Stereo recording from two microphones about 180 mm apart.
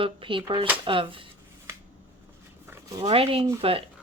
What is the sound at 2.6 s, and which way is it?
Dog, 15° right (ahead or behind).